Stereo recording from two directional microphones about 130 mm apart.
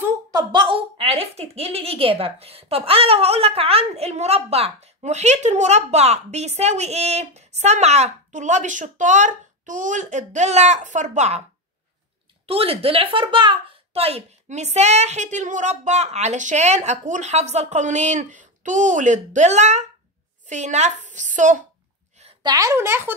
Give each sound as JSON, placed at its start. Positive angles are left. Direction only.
{"t": 0.3, "sound": "a woman's voice", "side_deg": -35}
{"t": 12.4, "sound": "a woman's voice", "side_deg": -45}
{"t": 22.4, "sound": "speech", "side_deg": -30}